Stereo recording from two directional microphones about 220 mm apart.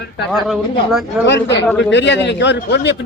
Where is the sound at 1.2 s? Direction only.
50° left (ahead or behind).